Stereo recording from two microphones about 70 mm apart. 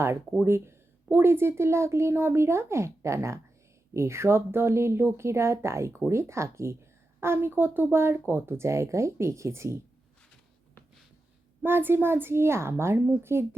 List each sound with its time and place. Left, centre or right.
0.4 s a woman's voice: right
11.6 s a woman's voice: right